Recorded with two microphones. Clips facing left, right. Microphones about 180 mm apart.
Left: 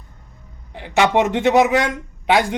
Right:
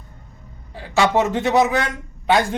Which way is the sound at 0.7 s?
20° left (ahead or behind).